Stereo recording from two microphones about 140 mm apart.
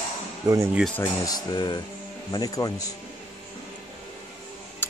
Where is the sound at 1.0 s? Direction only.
30° left (ahead or behind).